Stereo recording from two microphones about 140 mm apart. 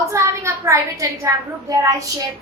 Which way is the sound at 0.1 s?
20° right (ahead or behind).